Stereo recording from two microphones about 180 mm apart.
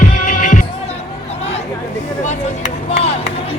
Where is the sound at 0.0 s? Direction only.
50° left (ahead or behind).